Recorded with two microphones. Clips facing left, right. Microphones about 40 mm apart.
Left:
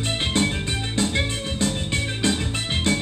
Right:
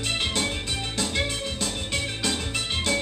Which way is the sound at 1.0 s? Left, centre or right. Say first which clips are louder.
Left 4 dB; left.